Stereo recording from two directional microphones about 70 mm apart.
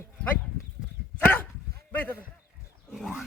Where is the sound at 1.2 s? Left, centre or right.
Left.